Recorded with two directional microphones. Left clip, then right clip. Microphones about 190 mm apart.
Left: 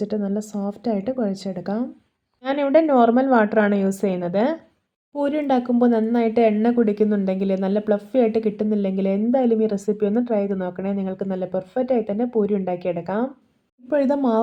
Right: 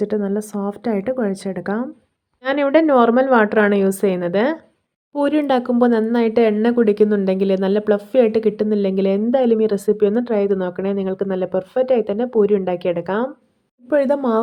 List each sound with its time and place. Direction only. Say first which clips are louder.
0.0 s speech: right 5 dB; 20° right (ahead or behind)